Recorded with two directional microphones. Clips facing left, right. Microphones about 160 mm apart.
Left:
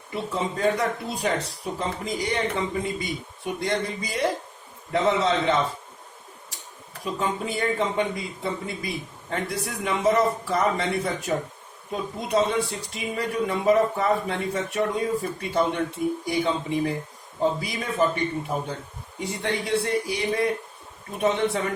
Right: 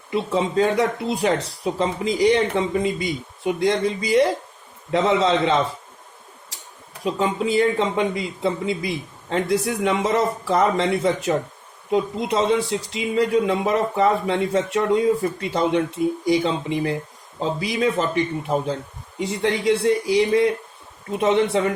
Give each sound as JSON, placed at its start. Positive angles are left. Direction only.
{"t": 0.1, "sound": "speech", "side_deg": -90}
{"t": 7.0, "sound": "speech", "side_deg": -90}